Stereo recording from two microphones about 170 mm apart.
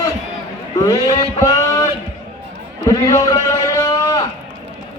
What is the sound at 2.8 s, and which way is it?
Speech, 20° left (ahead or behind).